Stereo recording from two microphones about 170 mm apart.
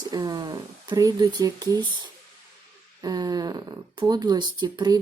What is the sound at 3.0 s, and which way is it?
Speech, 25° right (ahead or behind).